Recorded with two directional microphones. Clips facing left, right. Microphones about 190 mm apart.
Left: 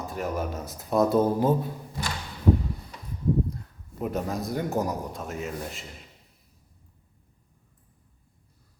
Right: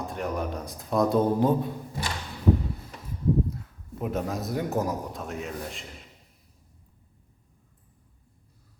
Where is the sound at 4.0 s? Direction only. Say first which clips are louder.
Even; centre (ahead or behind).